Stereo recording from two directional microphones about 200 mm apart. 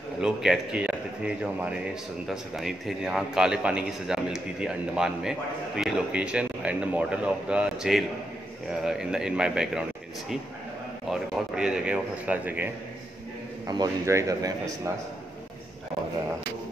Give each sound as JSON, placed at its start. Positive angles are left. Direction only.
{"t": 0.2, "sound": "a man's voice", "side_deg": -5}
{"t": 11.1, "sound": "a man's voice", "side_deg": -5}
{"t": 13.7, "sound": "a man's voice", "side_deg": -15}